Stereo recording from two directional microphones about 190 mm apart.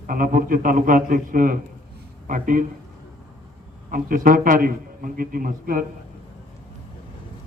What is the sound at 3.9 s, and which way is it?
A man's voice, 50° right (ahead or behind).